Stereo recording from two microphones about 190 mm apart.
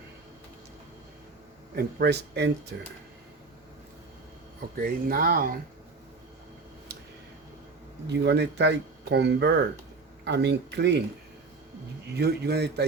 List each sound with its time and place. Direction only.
1.7 s speech: 60° right (ahead or behind)
4.8 s speech: 50° right (ahead or behind)
8.0 s speech: 65° right (ahead or behind)
12.1 s speech: 60° right (ahead or behind)